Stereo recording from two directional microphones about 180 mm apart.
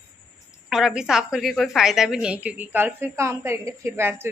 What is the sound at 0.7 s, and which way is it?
A woman's voice, 5° right (ahead or behind).